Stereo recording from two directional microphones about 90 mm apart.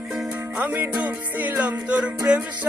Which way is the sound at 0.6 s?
15° right (ahead or behind).